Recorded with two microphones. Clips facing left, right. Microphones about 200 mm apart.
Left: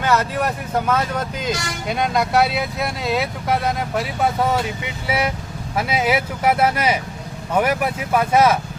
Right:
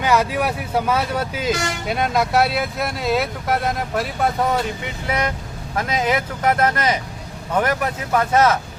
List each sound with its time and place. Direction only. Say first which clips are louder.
0.0 s speech: right 1 dB; 10° right (ahead or behind); by 8.5 s 10° left (ahead or behind)